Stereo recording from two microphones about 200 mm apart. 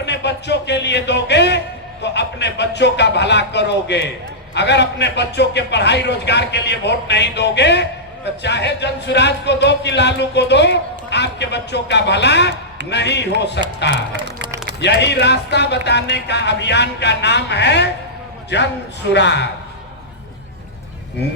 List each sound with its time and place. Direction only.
0.0 s music: 60° left (ahead or behind)
4.5 s a man's voice: 60° left (ahead or behind)
14.8 s a man's voice: 60° left (ahead or behind)